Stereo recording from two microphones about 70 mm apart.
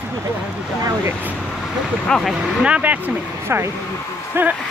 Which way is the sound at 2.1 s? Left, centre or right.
Centre.